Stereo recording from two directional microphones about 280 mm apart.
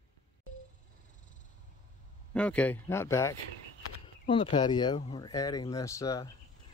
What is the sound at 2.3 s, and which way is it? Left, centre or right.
Speech, centre.